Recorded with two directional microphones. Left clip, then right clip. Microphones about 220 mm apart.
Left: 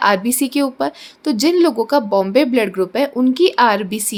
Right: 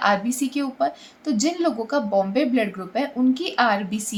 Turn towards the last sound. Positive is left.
turn(degrees=45)  # may be behind; listen again after turning